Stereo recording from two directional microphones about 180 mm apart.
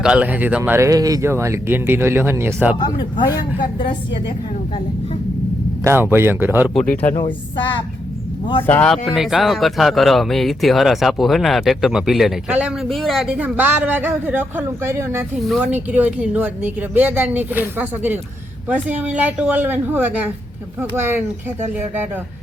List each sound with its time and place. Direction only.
0.0 s speech: 5° right (ahead or behind)
2.7 s speech: 25° left (ahead or behind)
5.8 s speech: 15° right (ahead or behind)
8.6 s speech: 10° left (ahead or behind); by 21.2 s 10° right (ahead or behind)